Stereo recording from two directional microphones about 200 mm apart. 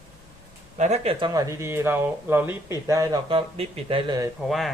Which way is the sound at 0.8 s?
35° right (ahead or behind).